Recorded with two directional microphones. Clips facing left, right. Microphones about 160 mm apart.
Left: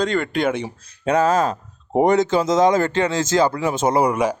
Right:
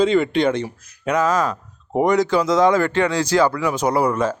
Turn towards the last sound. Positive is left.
turn(degrees=15)  # may be behind; listen again after turning